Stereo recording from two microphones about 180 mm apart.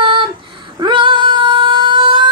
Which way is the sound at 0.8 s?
25° right (ahead or behind).